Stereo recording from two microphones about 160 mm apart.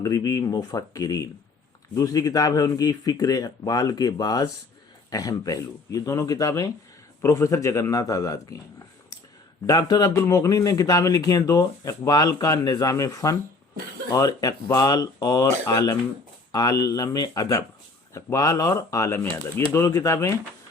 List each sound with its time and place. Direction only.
0.0 s a man's voice: 25° left (ahead or behind)
9.6 s a man's voice: 25° left (ahead or behind)